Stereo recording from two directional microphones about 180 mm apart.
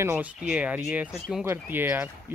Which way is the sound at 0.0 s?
10° right (ahead or behind).